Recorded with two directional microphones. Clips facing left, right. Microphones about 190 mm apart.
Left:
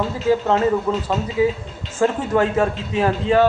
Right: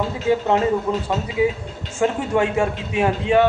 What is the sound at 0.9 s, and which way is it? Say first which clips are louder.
A man's voice: left 1 dB; 15° right (ahead or behind).